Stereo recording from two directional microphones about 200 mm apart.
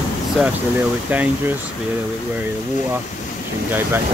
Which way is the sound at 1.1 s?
10° right (ahead or behind).